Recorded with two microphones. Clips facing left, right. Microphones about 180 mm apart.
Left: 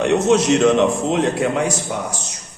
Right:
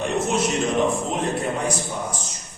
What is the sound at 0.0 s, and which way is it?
A man's voice, 80° left.